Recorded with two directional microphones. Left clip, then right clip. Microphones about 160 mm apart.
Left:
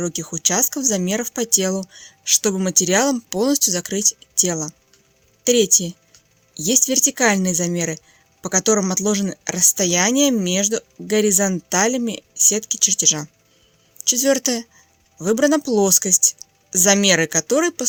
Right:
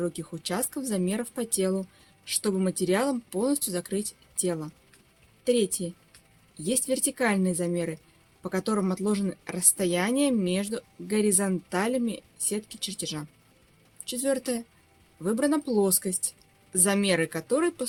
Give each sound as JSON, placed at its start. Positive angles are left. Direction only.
{"t": 0.0, "sound": "speech", "side_deg": 55}